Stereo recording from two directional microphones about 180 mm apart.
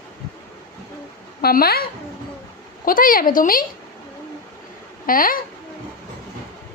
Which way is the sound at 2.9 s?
50° left (ahead or behind).